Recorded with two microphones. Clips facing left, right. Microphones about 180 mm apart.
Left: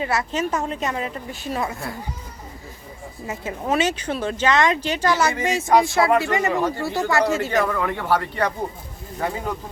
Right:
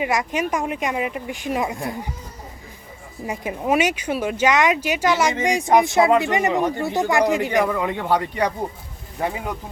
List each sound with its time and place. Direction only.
0.0 s speech: 15° right (ahead or behind)
3.2 s speech: 15° right (ahead or behind)